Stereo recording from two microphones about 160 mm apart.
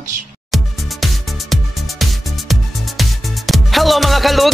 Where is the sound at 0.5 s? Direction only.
Centre (ahead or behind).